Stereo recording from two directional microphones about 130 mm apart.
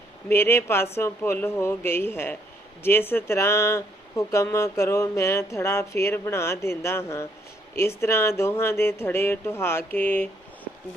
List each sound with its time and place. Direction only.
0.3 s speech: 15° left (ahead or behind)